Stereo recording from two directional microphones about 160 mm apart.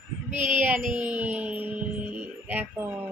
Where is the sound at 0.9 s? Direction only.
10° right (ahead or behind).